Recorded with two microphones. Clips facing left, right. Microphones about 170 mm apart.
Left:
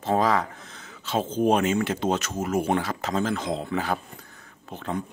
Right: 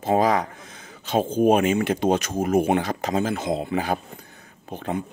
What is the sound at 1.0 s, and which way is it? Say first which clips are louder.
Speech: right 4 dB; 15° right (ahead or behind).